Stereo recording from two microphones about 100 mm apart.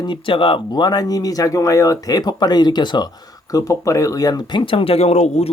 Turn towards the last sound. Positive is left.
turn(degrees=90)